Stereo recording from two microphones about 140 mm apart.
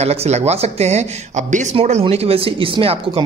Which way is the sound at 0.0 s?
50° right (ahead or behind).